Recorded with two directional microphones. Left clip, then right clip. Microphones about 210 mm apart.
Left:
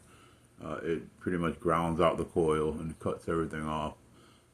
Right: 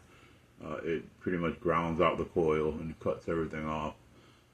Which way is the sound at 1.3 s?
25° left (ahead or behind).